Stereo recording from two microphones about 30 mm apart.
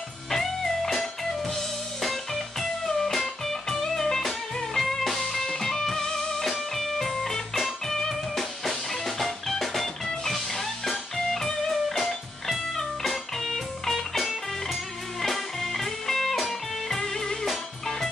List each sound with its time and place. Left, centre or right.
0.3 s music: centre
8.4 s music: centre
17.0 s music: centre